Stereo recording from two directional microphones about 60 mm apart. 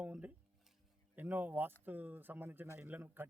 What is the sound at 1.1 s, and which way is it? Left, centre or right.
Speech, right.